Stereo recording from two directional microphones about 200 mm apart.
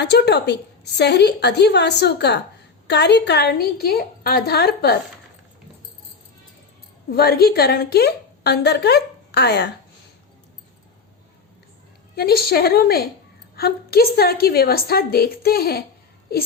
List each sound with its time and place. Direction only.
0.0 s a woman's voice: 55° left (ahead or behind)
7.1 s a woman's voice: 50° left (ahead or behind)
12.1 s a woman's voice: 50° left (ahead or behind)